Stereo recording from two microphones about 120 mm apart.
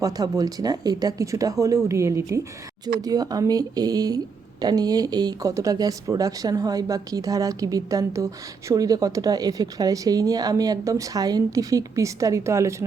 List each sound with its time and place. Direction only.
0.0 s speech: 30° right (ahead or behind)